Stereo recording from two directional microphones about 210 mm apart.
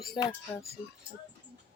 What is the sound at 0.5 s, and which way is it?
Speech, 10° left (ahead or behind).